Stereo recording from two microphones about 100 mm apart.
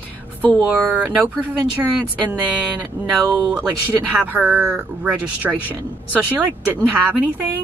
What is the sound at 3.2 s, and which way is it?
Speech, 40° right (ahead or behind).